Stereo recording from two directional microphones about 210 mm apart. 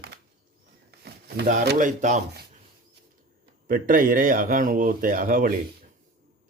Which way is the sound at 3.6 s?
40° right (ahead or behind).